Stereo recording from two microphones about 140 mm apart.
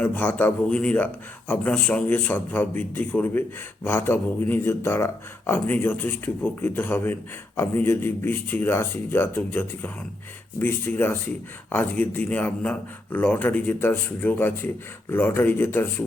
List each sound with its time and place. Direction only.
0.0 s speech: 15° left (ahead or behind)